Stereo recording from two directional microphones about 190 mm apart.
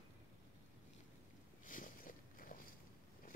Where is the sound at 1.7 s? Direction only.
45° left (ahead or behind).